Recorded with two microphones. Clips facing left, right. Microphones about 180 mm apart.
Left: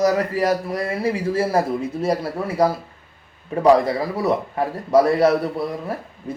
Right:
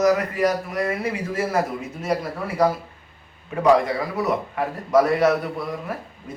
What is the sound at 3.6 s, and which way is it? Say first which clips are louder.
A man's voice: left 2 dB; 35° left (ahead or behind).